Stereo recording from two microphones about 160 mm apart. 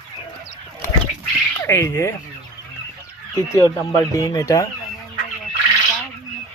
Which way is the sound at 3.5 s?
20° left (ahead or behind).